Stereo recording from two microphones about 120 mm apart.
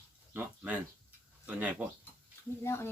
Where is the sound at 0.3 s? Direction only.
10° right (ahead or behind).